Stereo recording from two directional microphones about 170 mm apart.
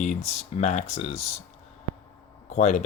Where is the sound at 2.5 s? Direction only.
40° left (ahead or behind).